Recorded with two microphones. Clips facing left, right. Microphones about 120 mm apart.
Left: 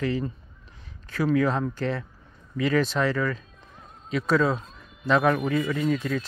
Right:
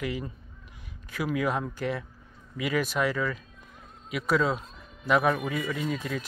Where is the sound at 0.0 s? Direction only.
15° right (ahead or behind).